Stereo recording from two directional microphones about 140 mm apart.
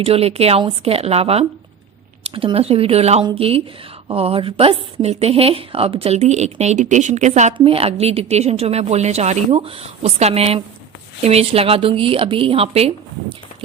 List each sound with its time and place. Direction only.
0.0 s a woman's voice: 45° right (ahead or behind)
7.6 s a woman's voice: 45° right (ahead or behind)